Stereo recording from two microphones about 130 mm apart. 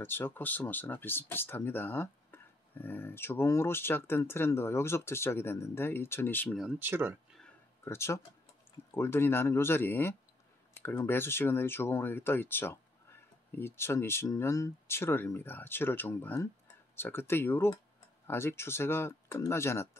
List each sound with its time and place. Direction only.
0.0 s speech: 15° left (ahead or behind)
6.8 s speech: 15° right (ahead or behind)
7.8 s speech: 20° left (ahead or behind)